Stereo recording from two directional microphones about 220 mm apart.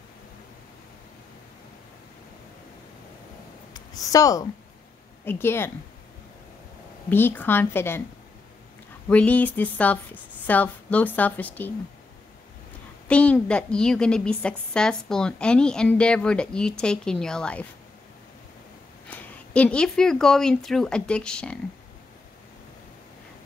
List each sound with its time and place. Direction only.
3.7 s speech: 15° left (ahead or behind)
7.1 s speech: 10° left (ahead or behind)
9.1 s speech: 5° left (ahead or behind)
13.1 s speech: 5° left (ahead or behind)
19.0 s speech: 5° left (ahead or behind)